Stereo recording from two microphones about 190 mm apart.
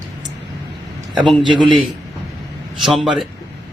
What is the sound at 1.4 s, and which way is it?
Speech, 25° right (ahead or behind).